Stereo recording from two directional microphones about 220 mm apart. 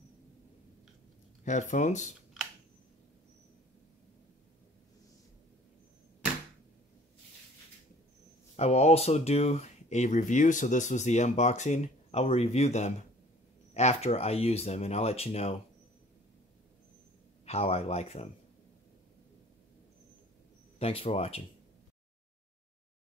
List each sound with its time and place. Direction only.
1.4 s speech: 35° left (ahead or behind)
8.5 s speech: 30° left (ahead or behind)
17.5 s speech: 25° left (ahead or behind)
20.8 s speech: 25° left (ahead or behind)